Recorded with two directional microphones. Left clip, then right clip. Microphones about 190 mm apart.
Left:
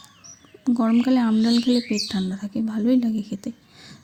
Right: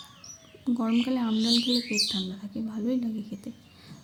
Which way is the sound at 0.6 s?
35° left (ahead or behind).